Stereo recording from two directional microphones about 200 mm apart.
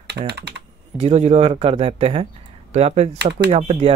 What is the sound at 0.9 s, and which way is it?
Speech, 35° right (ahead or behind).